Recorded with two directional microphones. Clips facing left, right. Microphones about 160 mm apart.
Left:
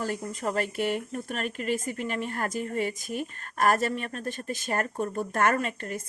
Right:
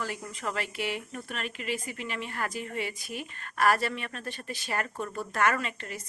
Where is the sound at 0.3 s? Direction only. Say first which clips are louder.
Left 5 dB; 45° left (ahead or behind).